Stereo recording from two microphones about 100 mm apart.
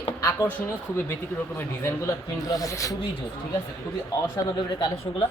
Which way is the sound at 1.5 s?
30° left (ahead or behind).